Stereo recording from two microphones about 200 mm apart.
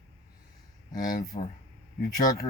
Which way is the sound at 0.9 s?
45° left (ahead or behind).